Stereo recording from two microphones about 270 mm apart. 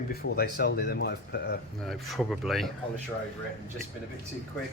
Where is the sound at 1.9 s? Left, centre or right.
Centre.